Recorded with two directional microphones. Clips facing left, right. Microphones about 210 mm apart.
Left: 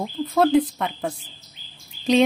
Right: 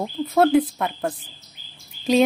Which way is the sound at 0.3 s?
5° right (ahead or behind).